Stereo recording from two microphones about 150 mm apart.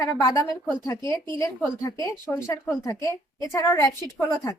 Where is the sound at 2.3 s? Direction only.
10° left (ahead or behind).